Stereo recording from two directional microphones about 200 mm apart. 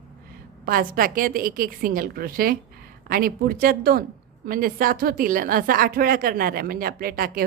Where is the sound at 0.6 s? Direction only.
45° right (ahead or behind).